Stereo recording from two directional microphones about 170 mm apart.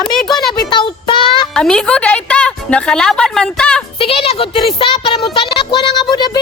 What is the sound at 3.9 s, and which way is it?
Speech, 35° left (ahead or behind).